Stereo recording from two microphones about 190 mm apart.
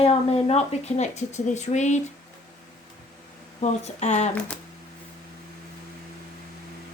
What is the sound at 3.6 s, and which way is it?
Speech, 35° left (ahead or behind).